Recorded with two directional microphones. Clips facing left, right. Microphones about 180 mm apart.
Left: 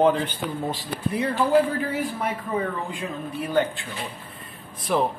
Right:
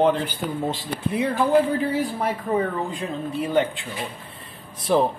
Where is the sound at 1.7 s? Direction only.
35° right (ahead or behind).